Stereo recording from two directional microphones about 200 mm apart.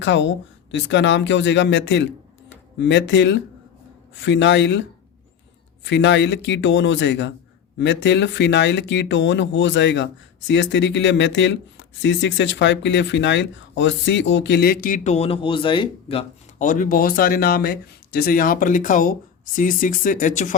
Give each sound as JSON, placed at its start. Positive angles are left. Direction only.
{"t": 0.0, "sound": "speech", "side_deg": 65}
{"t": 5.8, "sound": "speech", "side_deg": 65}
{"t": 16.6, "sound": "speech", "side_deg": 40}